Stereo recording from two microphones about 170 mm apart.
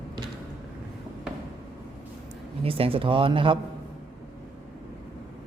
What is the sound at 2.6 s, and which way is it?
Speech, 35° right (ahead or behind).